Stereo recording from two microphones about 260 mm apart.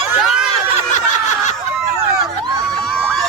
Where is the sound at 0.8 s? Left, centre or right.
Left.